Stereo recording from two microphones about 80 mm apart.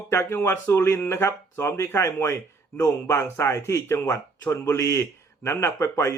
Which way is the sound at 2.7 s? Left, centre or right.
Left.